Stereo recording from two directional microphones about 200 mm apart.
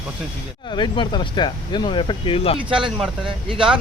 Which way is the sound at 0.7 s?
25° left (ahead or behind).